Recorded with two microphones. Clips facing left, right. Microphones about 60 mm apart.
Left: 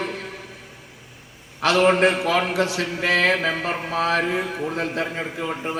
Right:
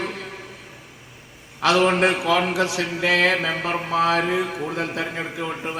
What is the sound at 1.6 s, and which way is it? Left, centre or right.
A man's voice, left.